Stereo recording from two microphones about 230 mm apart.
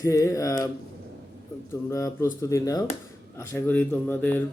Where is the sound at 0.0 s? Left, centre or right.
Centre.